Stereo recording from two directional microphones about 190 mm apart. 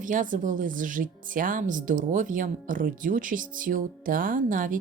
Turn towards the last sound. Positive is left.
turn(degrees=-45)  # may be behind; listen again after turning